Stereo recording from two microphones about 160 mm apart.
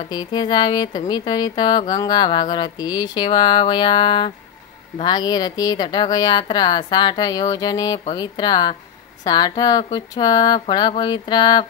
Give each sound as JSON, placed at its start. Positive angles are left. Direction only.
{"t": 0.1, "sound": "a woman's voice", "side_deg": 25}